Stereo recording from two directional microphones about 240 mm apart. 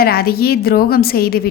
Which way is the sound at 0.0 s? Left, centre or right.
Left.